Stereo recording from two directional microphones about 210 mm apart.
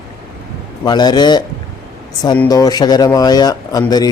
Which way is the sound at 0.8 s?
20° left (ahead or behind).